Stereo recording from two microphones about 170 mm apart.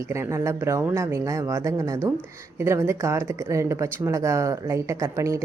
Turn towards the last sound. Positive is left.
turn(degrees=-15)  # may be behind; listen again after turning